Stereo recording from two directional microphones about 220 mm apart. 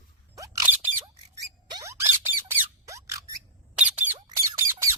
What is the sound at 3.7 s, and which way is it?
Squeak, 5° right (ahead or behind).